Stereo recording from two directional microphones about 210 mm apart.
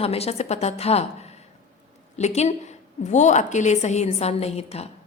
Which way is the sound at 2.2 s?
30° left (ahead or behind).